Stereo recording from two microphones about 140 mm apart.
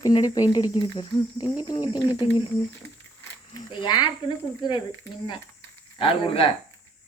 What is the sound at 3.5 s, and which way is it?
Speech, 35° left (ahead or behind).